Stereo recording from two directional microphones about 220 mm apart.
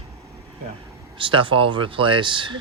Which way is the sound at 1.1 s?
25° right (ahead or behind).